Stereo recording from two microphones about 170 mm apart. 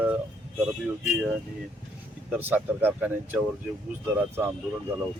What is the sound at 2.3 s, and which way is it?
Speech, 10° right (ahead or behind).